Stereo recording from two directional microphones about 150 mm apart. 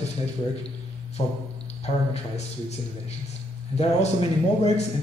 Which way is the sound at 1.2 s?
45° left (ahead or behind).